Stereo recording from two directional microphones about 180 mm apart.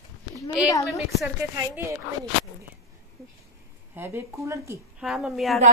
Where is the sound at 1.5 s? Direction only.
15° right (ahead or behind).